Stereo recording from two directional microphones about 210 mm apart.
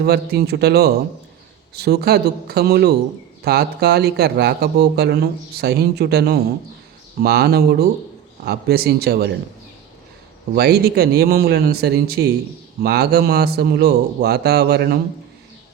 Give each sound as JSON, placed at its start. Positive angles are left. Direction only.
{"t": 0.0, "sound": "speech", "side_deg": -50}
{"t": 10.5, "sound": "speech", "side_deg": -50}